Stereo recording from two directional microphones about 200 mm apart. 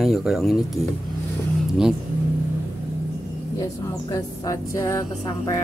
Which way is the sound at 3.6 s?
15° left (ahead or behind).